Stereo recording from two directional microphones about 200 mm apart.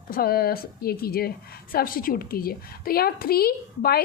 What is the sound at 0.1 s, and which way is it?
A woman's voice, 50° left (ahead or behind).